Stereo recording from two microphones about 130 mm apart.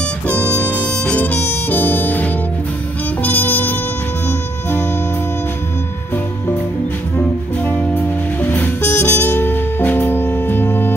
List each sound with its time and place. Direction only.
0.7 s harmonica: 10° left (ahead or behind)
3.2 s music: 15° left (ahead or behind)
7.2 s music: 15° left (ahead or behind)